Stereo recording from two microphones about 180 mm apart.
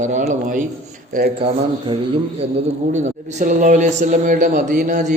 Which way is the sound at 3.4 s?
45° right (ahead or behind).